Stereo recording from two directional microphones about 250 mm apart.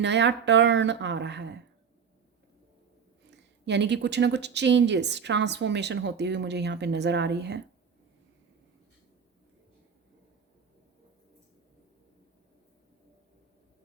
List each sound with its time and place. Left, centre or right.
0.0 s speech: right
3.2 s speech: right